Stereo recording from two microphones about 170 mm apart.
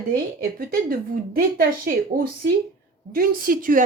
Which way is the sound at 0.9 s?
55° right (ahead or behind).